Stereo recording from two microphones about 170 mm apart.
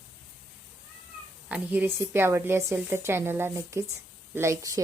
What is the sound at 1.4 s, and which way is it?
A woman's voice, 10° right (ahead or behind).